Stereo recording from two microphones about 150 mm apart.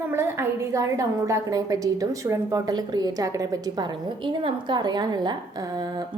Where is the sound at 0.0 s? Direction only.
15° right (ahead or behind).